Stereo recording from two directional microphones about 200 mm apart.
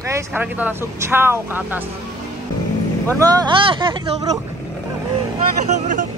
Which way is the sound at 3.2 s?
20° right (ahead or behind).